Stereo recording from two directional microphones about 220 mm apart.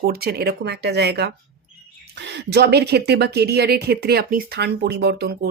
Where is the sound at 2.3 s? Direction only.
50° right (ahead or behind).